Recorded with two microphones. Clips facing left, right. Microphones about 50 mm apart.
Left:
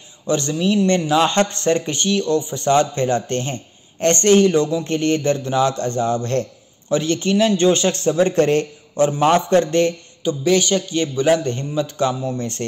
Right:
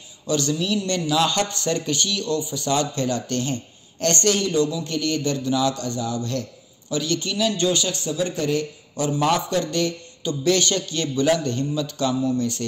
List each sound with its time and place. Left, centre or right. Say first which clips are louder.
0.3 s a man's voice: left 4 dB; left
10.2 s a woman's voice: left 4 dB; centre; by 12.6 s left